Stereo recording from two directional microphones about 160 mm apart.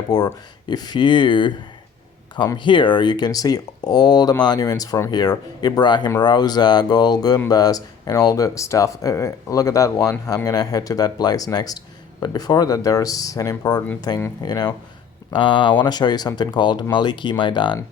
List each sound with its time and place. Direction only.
0.1 s speech: 25° left (ahead or behind)